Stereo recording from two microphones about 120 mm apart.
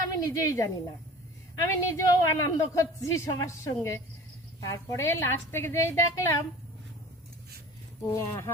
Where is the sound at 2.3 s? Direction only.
25° left (ahead or behind).